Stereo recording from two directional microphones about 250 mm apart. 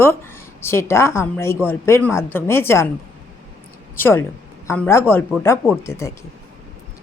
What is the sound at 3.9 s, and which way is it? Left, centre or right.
A woman's voice, centre.